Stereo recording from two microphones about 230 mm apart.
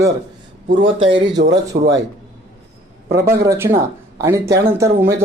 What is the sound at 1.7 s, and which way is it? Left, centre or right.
Speech, right.